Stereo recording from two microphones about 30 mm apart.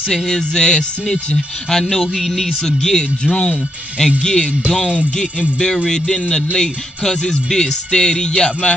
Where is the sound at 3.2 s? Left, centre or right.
Left.